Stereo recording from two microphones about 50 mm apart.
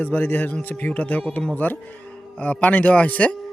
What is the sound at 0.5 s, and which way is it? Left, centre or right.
Speech, left.